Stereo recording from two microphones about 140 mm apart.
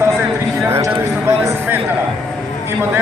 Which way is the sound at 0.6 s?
20° right (ahead or behind).